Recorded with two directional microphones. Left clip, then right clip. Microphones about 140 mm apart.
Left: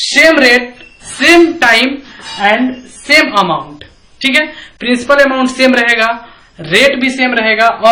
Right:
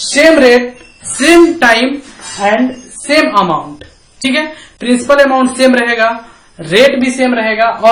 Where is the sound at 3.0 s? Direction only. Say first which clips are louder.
Left 1 dB; 50° right (ahead or behind).